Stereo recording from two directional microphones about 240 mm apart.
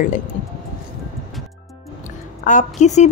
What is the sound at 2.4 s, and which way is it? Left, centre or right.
Speech, left.